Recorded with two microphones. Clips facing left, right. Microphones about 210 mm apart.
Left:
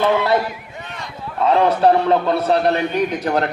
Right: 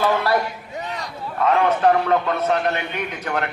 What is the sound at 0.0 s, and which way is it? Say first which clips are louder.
Speech: left 3 dB; 20° left (ahead or behind).